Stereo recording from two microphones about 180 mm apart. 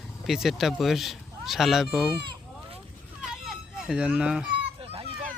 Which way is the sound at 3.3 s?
5° right (ahead or behind).